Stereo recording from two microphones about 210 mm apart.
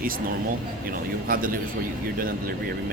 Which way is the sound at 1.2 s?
45° right (ahead or behind).